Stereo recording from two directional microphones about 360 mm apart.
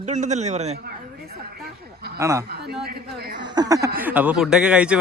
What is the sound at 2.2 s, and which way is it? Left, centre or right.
Speech, centre.